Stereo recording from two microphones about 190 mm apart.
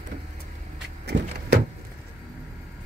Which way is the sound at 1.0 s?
60° right (ahead or behind).